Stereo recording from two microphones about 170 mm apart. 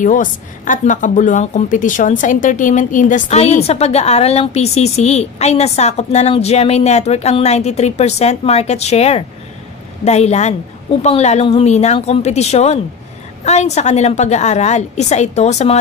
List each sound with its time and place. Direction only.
0.0 s a woman's voice: 50° left (ahead or behind)